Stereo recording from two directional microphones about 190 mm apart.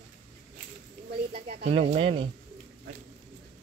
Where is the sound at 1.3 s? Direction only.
45° right (ahead or behind).